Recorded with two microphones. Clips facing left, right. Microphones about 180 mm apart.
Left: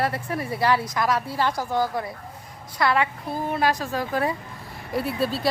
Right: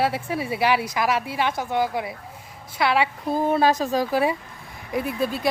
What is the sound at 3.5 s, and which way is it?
Speech, 20° right (ahead or behind).